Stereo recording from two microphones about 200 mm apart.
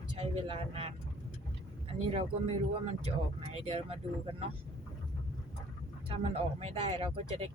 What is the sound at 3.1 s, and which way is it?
Speech, 30° right (ahead or behind).